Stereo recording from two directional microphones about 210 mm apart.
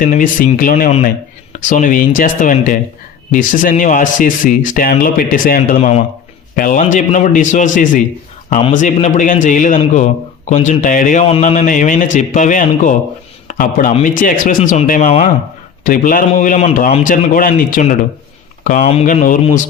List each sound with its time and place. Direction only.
0.1 s a man's voice: 40° left (ahead or behind)